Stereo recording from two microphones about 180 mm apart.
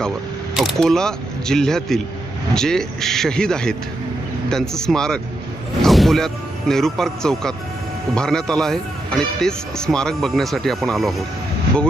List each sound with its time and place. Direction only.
0.5 s speech: centre (ahead or behind)